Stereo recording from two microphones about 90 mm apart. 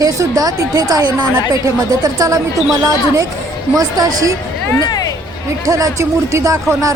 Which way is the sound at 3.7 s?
45° right (ahead or behind).